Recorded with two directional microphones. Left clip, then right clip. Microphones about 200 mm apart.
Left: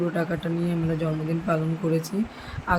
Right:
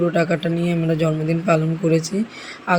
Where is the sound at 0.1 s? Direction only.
15° right (ahead or behind).